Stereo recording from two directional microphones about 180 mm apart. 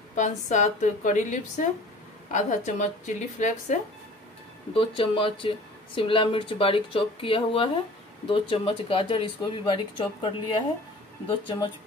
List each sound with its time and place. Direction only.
0.1 s a woman's voice: 45° left (ahead or behind)
4.7 s speech: 30° left (ahead or behind)